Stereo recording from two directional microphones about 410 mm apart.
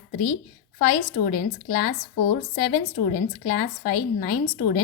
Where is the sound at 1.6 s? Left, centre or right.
Left.